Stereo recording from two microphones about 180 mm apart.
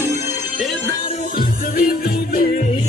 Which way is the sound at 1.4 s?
55° left (ahead or behind).